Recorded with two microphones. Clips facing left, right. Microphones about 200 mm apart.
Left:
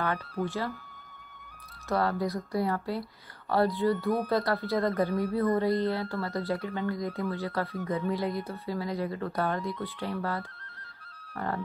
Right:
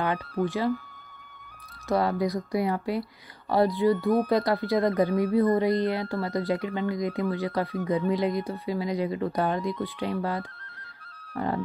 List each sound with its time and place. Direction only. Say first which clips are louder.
0.5 s speech: right 7 dB; 15° right (ahead or behind)
1.9 s speech: right 3 dB; 15° right (ahead or behind)